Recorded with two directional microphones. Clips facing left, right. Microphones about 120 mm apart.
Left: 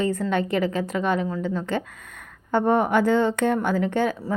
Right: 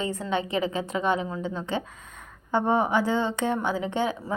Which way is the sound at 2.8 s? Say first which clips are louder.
Left 5 dB; 60° left (ahead or behind).